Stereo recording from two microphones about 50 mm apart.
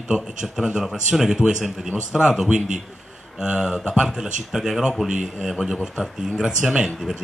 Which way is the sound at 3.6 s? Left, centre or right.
Centre.